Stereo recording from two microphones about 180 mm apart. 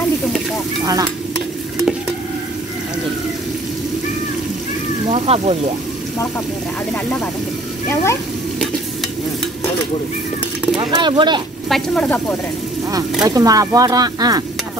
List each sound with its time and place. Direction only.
5.1 s speech: 35° right (ahead or behind)
7.9 s speech: 15° left (ahead or behind)
10.8 s speech: 25° right (ahead or behind)
11.7 s speech: 5° left (ahead or behind)
13.2 s speech: 20° right (ahead or behind)